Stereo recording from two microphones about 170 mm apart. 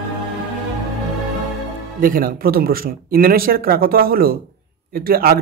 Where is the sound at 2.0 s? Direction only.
55° right (ahead or behind).